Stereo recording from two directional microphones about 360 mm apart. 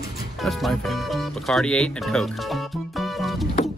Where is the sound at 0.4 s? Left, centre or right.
Centre.